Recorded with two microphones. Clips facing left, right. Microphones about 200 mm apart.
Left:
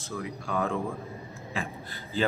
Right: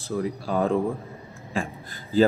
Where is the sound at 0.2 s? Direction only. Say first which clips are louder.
Right 6 dB; 35° right (ahead or behind).